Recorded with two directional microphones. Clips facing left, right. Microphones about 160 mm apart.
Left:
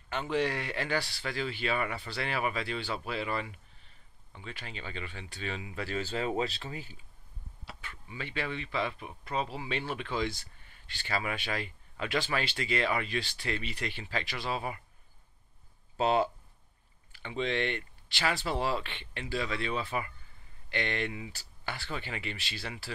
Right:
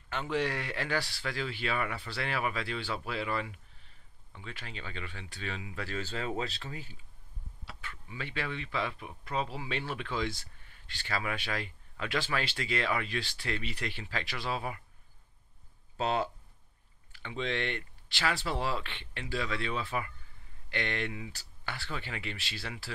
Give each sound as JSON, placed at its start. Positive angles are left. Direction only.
{"t": 0.1, "sound": "speech", "side_deg": 5}
{"t": 4.3, "sound": "speech", "side_deg": 15}
{"t": 8.1, "sound": "speech", "side_deg": 5}
{"t": 11.1, "sound": "speech", "side_deg": 15}
{"t": 11.3, "sound": "speech", "side_deg": 5}
{"t": 16.0, "sound": "speech", "side_deg": 10}